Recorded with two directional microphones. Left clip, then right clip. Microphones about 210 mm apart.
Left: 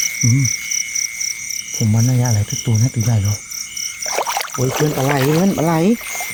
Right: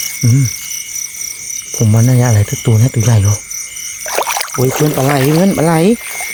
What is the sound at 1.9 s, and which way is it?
Speech, 35° right (ahead or behind).